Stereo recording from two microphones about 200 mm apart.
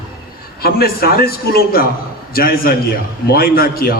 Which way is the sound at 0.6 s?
50° left (ahead or behind).